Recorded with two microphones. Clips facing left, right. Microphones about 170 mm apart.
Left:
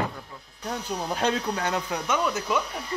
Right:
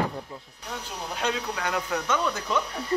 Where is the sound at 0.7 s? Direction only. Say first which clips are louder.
Left 6 dB; 35° left (ahead or behind).